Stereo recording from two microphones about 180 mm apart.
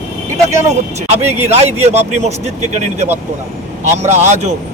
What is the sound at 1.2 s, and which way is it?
Speech, 40° right (ahead or behind).